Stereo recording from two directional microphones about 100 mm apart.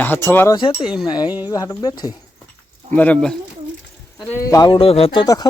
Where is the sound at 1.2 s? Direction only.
15° right (ahead or behind).